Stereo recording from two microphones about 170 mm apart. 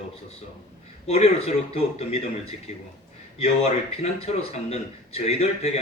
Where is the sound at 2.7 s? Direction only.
40° left (ahead or behind).